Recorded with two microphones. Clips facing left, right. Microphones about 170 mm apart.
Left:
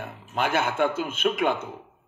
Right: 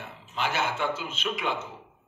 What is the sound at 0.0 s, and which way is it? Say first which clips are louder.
A man's voice: left 4 dB; 50° left (ahead or behind).